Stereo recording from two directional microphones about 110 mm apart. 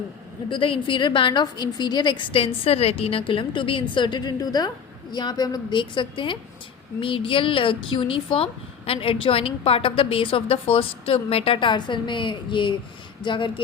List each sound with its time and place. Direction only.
0.5 s a woman's voice: 50° left (ahead or behind)